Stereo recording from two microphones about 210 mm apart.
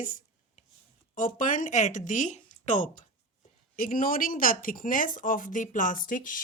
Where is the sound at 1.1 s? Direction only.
40° left (ahead or behind).